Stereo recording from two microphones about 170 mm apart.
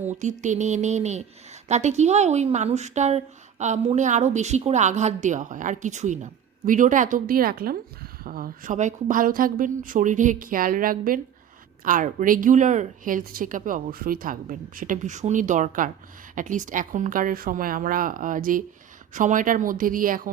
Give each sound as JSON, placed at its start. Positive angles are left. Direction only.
{"t": 0.0, "sound": "a woman's voice", "side_deg": -45}